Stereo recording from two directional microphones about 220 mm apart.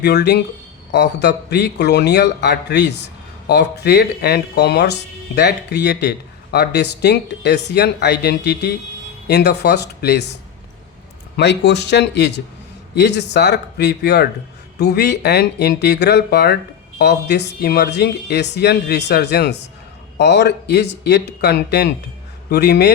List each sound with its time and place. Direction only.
0.0 s a man's voice: 50° left (ahead or behind)
11.3 s a man's voice: 50° left (ahead or behind)